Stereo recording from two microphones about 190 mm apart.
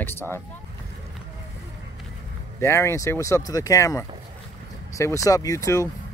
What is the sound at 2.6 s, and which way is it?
Speech, 15° left (ahead or behind).